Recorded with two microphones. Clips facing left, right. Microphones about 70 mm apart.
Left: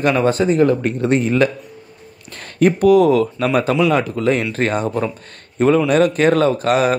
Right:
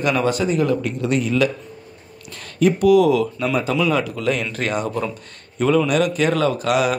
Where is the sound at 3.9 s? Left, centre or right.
Left.